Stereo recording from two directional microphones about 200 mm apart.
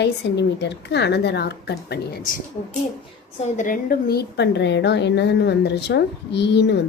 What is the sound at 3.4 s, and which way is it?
A woman's voice, 40° left (ahead or behind).